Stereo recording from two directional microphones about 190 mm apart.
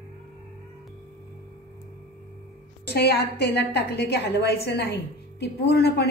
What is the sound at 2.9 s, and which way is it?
A woman's voice, 60° left (ahead or behind).